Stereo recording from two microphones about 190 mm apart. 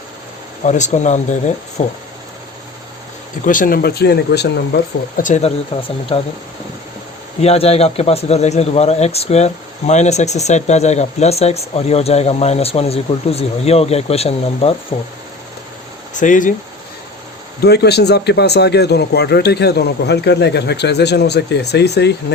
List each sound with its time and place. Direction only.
0.6 s speech: 40° left (ahead or behind)
3.4 s speech: 45° left (ahead or behind)
7.4 s speech: 35° left (ahead or behind)
16.1 s speech: 40° left (ahead or behind)
17.6 s speech: 60° left (ahead or behind)